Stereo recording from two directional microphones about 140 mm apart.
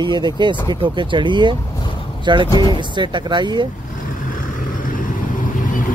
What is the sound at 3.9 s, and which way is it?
Vehicle, 75° left (ahead or behind).